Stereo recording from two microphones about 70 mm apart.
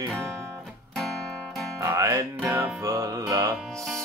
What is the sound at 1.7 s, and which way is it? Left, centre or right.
Music, right.